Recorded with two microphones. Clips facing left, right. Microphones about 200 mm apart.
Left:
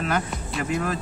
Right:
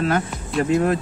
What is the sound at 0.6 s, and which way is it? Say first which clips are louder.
Music: right 8 dB; 25° right (ahead or behind).